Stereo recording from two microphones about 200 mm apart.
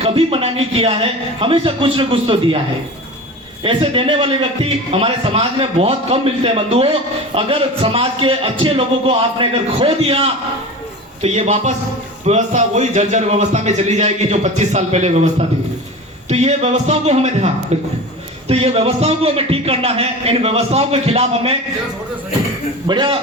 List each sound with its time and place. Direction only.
0.0 s a man's voice: 30° right (ahead or behind)
3.6 s a man's voice: 25° right (ahead or behind)
22.9 s a man's voice: 20° right (ahead or behind)